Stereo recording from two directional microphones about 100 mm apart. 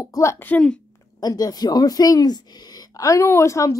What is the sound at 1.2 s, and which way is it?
A woman's voice, 40° left (ahead or behind).